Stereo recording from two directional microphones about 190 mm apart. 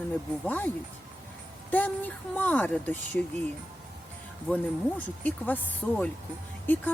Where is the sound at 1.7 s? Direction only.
10° left (ahead or behind).